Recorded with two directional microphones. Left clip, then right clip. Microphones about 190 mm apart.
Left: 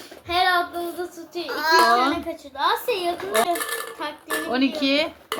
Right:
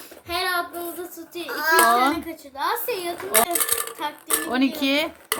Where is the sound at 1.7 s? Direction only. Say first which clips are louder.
Even; 25° right (ahead or behind).